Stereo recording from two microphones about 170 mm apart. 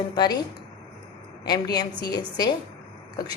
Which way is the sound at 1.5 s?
25° left (ahead or behind).